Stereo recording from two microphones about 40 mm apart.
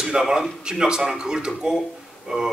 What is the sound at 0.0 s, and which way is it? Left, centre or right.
A man's voice, centre.